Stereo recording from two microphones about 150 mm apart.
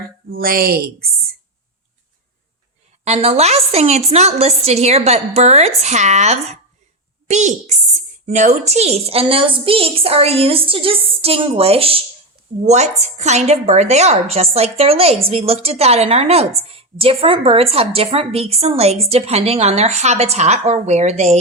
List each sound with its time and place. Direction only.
0.3 s a woman's voice: 75° right (ahead or behind); by 1.0 s 90° right
3.0 s a woman's voice: 45° right (ahead or behind)
12.6 s a woman's voice: 50° right (ahead or behind)